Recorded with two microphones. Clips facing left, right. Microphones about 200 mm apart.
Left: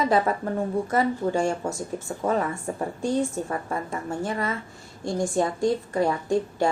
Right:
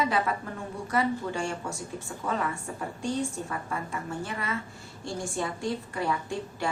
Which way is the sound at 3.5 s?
35° left (ahead or behind).